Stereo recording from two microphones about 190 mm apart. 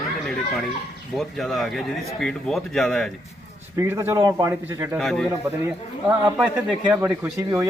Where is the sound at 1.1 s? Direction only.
Centre (ahead or behind).